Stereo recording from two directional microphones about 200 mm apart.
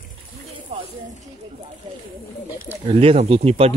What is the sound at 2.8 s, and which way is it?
Speech, 30° right (ahead or behind).